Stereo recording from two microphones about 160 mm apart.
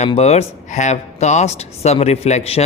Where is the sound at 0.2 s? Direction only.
40° left (ahead or behind).